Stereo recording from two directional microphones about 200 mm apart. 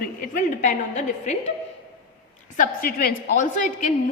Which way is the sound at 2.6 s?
45° left (ahead or behind).